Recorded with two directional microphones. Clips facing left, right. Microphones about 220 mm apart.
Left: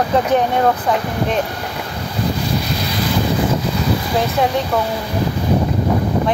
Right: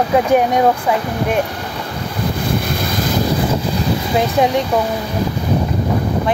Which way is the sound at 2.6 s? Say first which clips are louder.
Right 1 dB; 50° right (ahead or behind).